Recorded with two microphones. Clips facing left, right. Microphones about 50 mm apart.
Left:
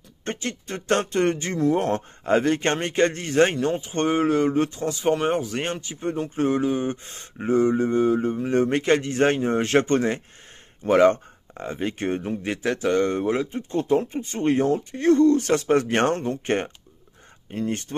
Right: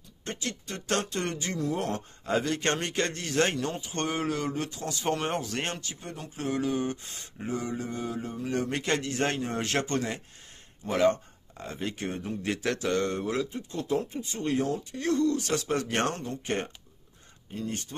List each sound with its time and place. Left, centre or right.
0.2 s speech: left
5.0 s speech: centre
5.9 s speech: left
10.8 s speech: left
11.6 s a man's voice: left